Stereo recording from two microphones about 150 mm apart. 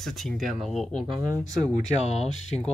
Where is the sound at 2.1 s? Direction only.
50° left (ahead or behind).